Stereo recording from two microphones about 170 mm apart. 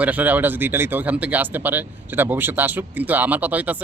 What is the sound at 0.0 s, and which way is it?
Speech, 10° right (ahead or behind).